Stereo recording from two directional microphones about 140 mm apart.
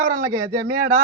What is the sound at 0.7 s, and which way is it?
Speech, 90° right.